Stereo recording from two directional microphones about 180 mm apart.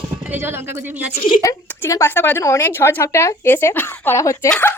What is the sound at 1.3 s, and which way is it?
Speech, 20° left (ahead or behind).